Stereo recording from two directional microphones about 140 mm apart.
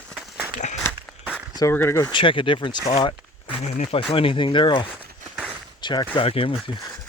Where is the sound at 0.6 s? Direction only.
60° left (ahead or behind).